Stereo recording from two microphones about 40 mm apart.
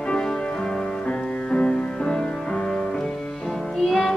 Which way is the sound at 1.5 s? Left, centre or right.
Left.